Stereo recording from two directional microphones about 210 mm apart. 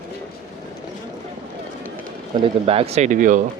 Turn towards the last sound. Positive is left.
turn(degrees=-40)  # may be behind; listen again after turning